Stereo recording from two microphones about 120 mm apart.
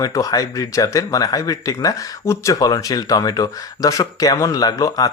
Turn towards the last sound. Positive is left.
turn(degrees=30)  # may be behind; listen again after turning